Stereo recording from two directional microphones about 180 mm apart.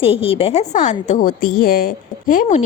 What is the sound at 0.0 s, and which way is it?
A woman's voice, 30° left (ahead or behind).